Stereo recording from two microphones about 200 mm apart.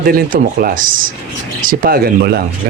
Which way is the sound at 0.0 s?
45° right (ahead or behind).